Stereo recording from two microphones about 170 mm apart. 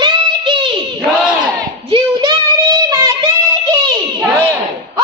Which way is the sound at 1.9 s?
25° right (ahead or behind).